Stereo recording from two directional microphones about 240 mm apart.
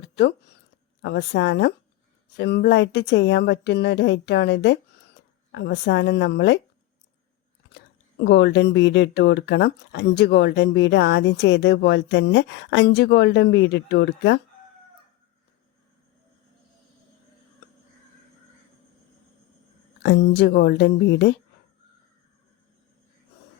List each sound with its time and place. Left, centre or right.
0.0 s zipper: left
1.0 s speech: left
8.2 s speech: left
20.0 s speech: left